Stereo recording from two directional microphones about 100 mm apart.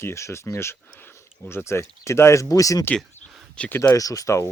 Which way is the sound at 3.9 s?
35° left (ahead or behind).